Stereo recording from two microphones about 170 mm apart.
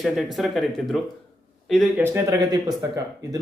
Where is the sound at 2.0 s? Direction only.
15° right (ahead or behind).